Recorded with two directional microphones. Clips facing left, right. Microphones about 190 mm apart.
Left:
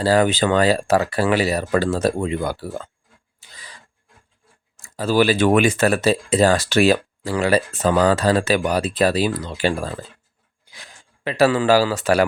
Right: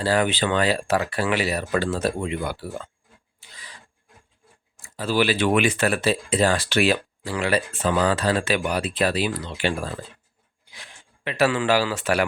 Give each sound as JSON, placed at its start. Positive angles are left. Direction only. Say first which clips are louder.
{"t": 0.0, "sound": "speech", "louder": "left 5 dB", "side_deg": 40}
{"t": 3.4, "sound": "filing", "louder": "left 2 dB", "side_deg": 40}
{"t": 4.9, "sound": "speech", "louder": "left 5 dB", "side_deg": 45}